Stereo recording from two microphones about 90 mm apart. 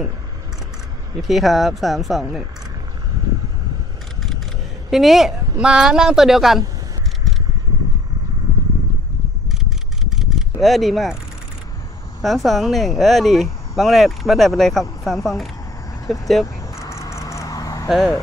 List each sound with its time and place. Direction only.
1.2 s speech: centre (ahead or behind)
4.9 s speech: centre (ahead or behind)
9.5 s camera: 5° right (ahead or behind)
12.2 s speech: centre (ahead or behind)
16.7 s vehicle: 30° left (ahead or behind)
17.8 s speech: centre (ahead or behind)